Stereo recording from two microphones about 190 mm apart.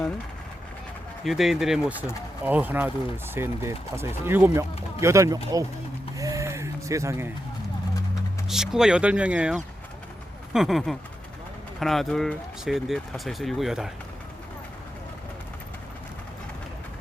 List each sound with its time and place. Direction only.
1.2 s speech: centre (ahead or behind); by 5.6 s 15° right (ahead or behind)
6.1 s a sound: 15° right (ahead or behind)
8.4 s speech: centre (ahead or behind)